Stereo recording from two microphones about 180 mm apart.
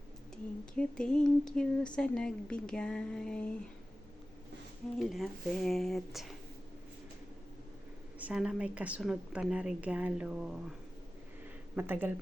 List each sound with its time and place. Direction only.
0.6 s a woman's voice: 5° left (ahead or behind)
4.9 s a woman's voice: centre (ahead or behind)
8.2 s a woman's voice: 5° right (ahead or behind)
11.8 s speech: 10° right (ahead or behind)